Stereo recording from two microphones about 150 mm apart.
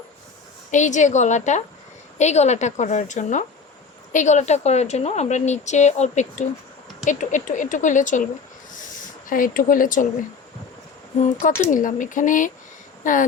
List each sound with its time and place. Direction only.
0.7 s a woman's voice: 55° left (ahead or behind)
8.7 s a sound: 60° left (ahead or behind)
11.4 s speech: 60° left (ahead or behind)